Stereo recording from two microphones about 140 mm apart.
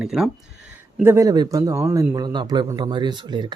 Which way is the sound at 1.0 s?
20° right (ahead or behind).